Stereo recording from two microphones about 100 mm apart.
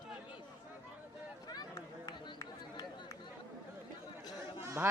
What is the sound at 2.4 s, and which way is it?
Chatter, 35° left (ahead or behind).